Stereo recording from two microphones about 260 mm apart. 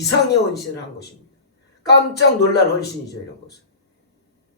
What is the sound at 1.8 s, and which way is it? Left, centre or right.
A man's voice, left.